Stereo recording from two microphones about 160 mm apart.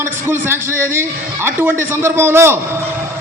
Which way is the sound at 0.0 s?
15° right (ahead or behind).